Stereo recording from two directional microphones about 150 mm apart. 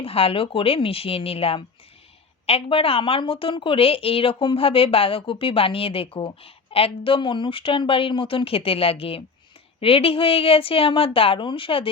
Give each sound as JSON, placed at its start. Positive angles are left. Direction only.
{"t": 0.0, "sound": "a woman's voice", "side_deg": 40}